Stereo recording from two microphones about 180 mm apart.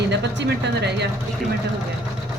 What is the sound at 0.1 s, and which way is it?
Speech, 70° right (ahead or behind).